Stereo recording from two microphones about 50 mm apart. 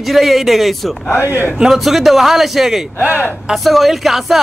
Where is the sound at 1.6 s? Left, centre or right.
Centre.